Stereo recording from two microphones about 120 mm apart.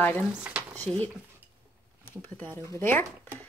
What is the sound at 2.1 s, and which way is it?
Speech, 15° left (ahead or behind).